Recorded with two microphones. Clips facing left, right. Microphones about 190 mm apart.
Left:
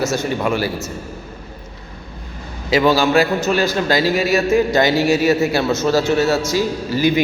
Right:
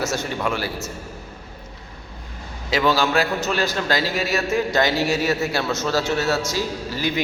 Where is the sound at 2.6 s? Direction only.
10° left (ahead or behind).